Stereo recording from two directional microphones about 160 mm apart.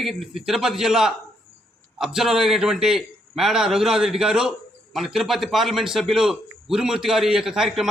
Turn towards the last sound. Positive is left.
turn(degrees=-5)  # may be behind; listen again after turning